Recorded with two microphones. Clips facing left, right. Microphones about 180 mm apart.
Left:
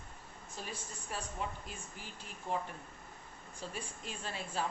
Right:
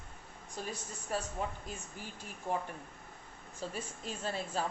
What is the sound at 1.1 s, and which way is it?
Speech, 40° right (ahead or behind).